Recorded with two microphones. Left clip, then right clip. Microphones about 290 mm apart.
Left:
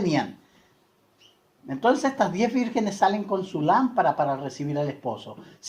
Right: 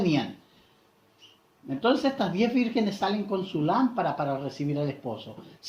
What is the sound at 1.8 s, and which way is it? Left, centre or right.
Speech, left.